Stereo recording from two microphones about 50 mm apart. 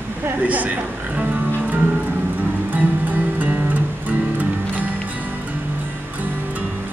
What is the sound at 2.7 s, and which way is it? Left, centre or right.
Music, right.